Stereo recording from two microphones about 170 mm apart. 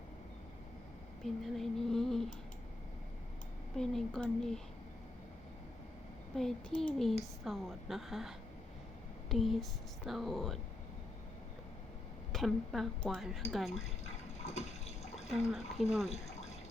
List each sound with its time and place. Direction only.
1.2 s speech: centre (ahead or behind)
3.8 s speech: 5° left (ahead or behind)
6.3 s speech: 5° left (ahead or behind)
12.3 s speech: centre (ahead or behind)
14.3 s water: 40° left (ahead or behind)
15.5 s speech: centre (ahead or behind)
16.0 s water: 40° left (ahead or behind)